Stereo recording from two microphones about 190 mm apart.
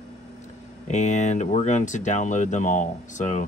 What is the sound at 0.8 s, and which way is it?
Speech, 40° left (ahead or behind).